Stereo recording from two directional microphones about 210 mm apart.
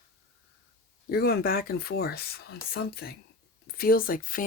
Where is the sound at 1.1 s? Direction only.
45° left (ahead or behind).